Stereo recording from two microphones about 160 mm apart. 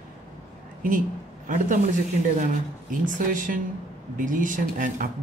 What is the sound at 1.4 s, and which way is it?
Speech, 55° right (ahead or behind).